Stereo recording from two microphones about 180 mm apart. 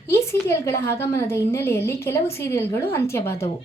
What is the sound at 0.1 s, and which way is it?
A woman's voice, 15° left (ahead or behind).